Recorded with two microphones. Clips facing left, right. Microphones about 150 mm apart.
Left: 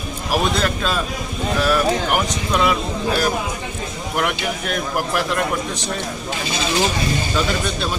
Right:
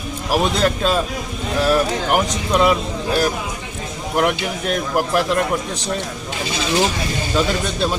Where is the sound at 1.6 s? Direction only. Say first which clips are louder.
Right 1 dB; 20° right (ahead or behind).